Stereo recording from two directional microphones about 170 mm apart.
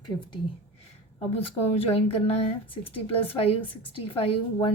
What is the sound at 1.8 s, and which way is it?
A woman's voice, 35° left (ahead or behind).